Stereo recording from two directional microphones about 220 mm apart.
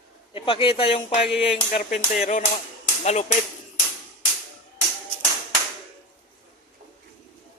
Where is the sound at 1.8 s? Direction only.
35° left (ahead or behind).